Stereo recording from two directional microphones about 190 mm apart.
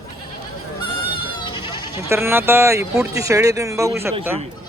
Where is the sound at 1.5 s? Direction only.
25° left (ahead or behind).